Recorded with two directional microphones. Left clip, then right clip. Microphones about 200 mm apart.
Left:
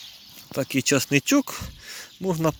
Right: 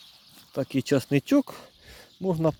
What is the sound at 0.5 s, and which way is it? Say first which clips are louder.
Speech: left 3 dB; 20° right (ahead or behind).